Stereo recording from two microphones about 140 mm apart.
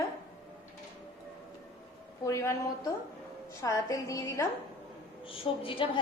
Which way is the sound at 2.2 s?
20° left (ahead or behind).